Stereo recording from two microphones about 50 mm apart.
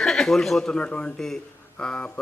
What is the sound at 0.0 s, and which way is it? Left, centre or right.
Speech, centre.